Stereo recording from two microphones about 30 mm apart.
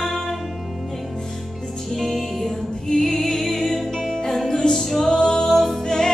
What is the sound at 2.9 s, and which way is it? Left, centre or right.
Music, centre.